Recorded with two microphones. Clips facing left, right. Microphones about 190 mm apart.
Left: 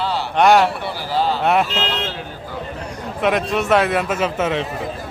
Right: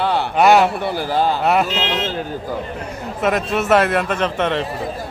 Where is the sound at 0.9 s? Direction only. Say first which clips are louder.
Right 2 dB; 50° right (ahead or behind).